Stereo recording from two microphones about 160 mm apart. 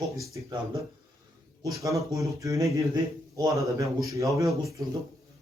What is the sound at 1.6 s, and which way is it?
A man's voice, 20° right (ahead or behind).